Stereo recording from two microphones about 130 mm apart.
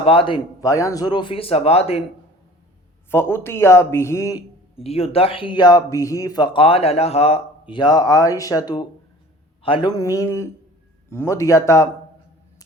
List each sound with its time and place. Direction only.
0.0 s speech: 45° left (ahead or behind)
0.6 s a man's voice: 25° left (ahead or behind); by 2.0 s 50° left (ahead or behind)
3.1 s speech: 20° left (ahead or behind)
4.8 s speech: 50° left (ahead or behind)
7.7 s a man's voice: 35° left (ahead or behind)
9.9 s speech: 25° left (ahead or behind)